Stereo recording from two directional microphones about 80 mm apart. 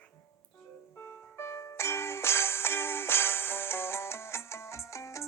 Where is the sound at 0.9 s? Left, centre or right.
Left.